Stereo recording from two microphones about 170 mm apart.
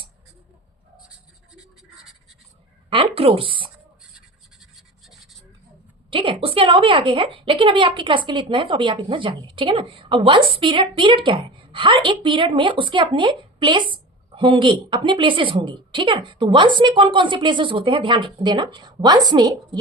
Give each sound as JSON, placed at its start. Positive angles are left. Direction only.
{"t": 2.9, "sound": "a woman's voice", "side_deg": -35}
{"t": 4.6, "sound": "scratch", "side_deg": 0}
{"t": 6.1, "sound": "a woman's voice", "side_deg": -30}